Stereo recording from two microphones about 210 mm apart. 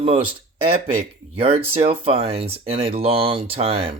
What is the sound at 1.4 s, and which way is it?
Speech, 25° right (ahead or behind).